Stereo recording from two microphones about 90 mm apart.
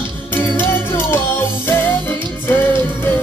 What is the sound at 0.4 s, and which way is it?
Music, 25° left (ahead or behind).